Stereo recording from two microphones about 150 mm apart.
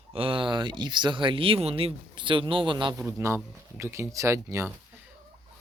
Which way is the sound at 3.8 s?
20° right (ahead or behind).